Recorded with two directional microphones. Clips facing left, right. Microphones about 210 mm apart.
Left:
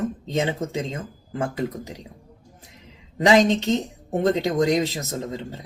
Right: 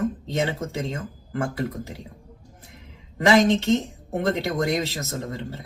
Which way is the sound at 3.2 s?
20° left (ahead or behind).